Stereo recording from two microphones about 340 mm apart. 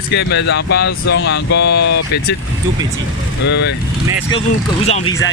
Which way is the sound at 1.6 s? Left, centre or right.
Left.